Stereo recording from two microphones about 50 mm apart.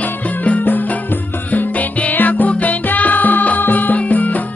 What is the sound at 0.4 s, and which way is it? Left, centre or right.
Music, left.